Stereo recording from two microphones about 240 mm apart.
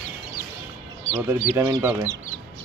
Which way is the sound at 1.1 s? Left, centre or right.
Centre.